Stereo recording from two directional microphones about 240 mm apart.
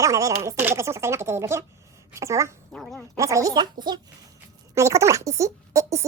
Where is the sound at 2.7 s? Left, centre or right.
Centre.